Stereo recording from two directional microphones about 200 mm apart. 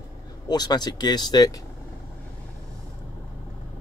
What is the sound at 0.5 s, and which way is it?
Speech, 20° left (ahead or behind).